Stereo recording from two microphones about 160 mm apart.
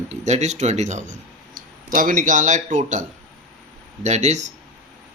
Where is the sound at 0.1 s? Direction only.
45° right (ahead or behind).